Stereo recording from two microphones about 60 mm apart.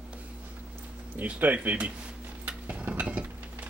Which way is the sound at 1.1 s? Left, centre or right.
Right.